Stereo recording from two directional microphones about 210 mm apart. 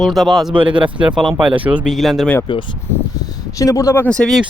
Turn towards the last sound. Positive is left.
turn(degrees=5)  # may be behind; listen again after turning